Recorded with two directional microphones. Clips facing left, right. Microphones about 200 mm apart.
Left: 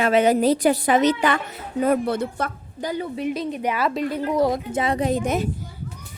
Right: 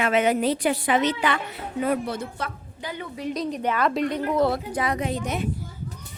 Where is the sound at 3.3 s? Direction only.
5° left (ahead or behind).